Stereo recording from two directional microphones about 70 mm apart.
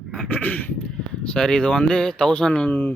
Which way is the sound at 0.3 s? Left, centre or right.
Left.